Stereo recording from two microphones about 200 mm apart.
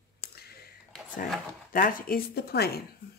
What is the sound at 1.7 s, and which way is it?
Speech, 45° left (ahead or behind).